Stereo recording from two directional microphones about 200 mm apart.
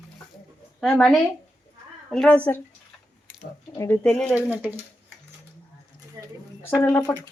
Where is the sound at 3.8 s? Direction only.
10° left (ahead or behind).